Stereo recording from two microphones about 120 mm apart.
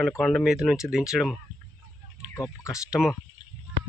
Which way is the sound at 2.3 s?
25° left (ahead or behind).